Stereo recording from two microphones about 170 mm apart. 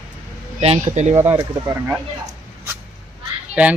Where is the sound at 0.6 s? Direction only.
40° right (ahead or behind).